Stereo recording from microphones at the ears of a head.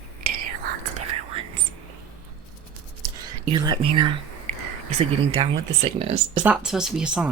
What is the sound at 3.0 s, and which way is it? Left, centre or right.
Speech, right.